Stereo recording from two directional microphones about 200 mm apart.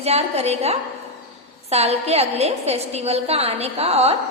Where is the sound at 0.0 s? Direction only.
30° right (ahead or behind).